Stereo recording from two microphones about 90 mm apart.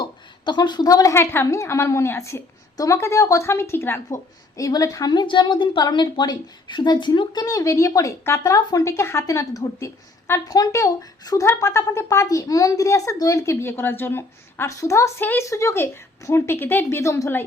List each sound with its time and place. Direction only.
0.0 s a sound: 55° left (ahead or behind)
1.1 s speech: 25° left (ahead or behind)
4.5 s speech: 40° left (ahead or behind)
5.2 s a woman's voice: 60° left (ahead or behind)
7.4 s a woman's voice: 35° left (ahead or behind)